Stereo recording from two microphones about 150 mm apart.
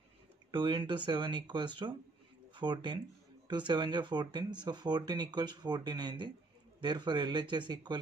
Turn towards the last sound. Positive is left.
turn(degrees=-30)  # may be behind; listen again after turning